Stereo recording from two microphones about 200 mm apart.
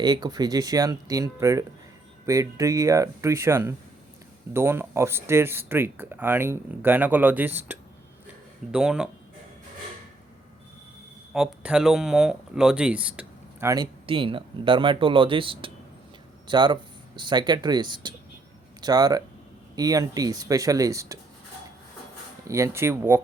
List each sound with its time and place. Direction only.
0.0 s speech: 20° right (ahead or behind); by 9.0 s 5° right (ahead or behind)
11.3 s speech: 5° right (ahead or behind)
14.1 s speech: 25° right (ahead or behind)
22.4 s speech: 15° right (ahead or behind)